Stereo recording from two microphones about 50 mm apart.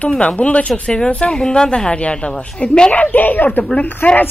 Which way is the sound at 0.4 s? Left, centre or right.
Left.